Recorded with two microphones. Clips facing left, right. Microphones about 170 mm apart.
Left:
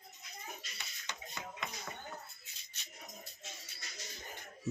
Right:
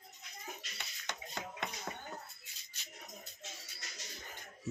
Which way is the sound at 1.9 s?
45° right (ahead or behind).